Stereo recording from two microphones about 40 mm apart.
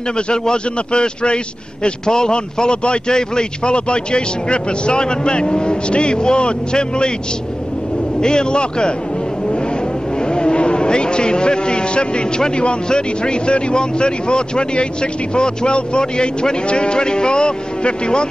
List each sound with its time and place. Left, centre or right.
0.3 s a man's voice: left
8.2 s a man's voice: left
10.1 s a man's voice: left